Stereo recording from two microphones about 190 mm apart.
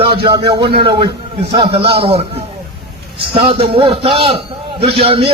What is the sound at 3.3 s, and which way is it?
A man's voice, 30° right (ahead or behind).